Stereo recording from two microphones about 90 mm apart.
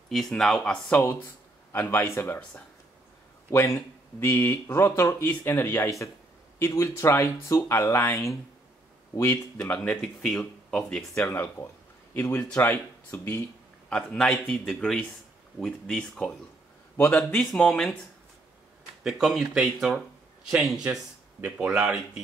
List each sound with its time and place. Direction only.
0.1 s speech: 5° left (ahead or behind)
0.8 s speech: 20° left (ahead or behind)
4.8 s speech: 35° left (ahead or behind)
9.7 s speech: 15° left (ahead or behind)
11.1 s speech: 25° left (ahead or behind)
13.8 s a man's voice: 5° left (ahead or behind)
16.9 s a man's voice: 20° left (ahead or behind)
17.2 s a man's voice: 5° left (ahead or behind)
19.0 s a man's voice: 5° right (ahead or behind)